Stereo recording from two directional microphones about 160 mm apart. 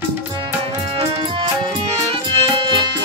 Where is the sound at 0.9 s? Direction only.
35° right (ahead or behind).